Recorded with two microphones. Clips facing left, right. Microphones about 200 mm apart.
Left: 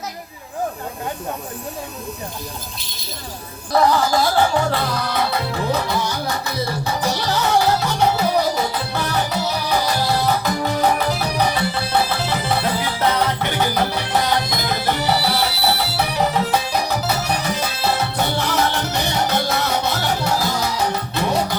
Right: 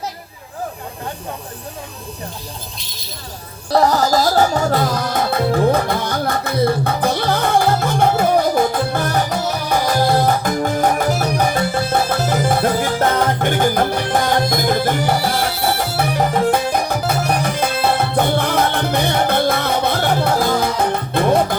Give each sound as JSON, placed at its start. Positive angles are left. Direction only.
{"t": 2.7, "sound": "speech", "side_deg": 0}
{"t": 3.7, "sound": "music", "side_deg": -40}